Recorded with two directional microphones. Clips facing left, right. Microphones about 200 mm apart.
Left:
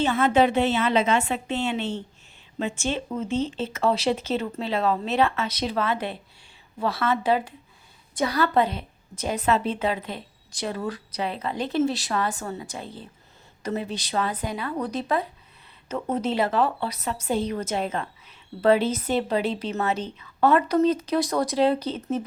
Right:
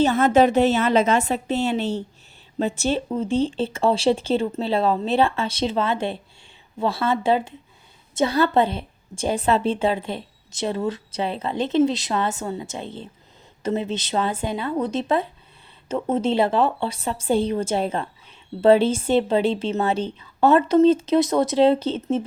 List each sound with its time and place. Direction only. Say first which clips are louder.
0.0 s a woman's voice: right 4 dB; 40° right (ahead or behind); by 22.2 s 25° right (ahead or behind)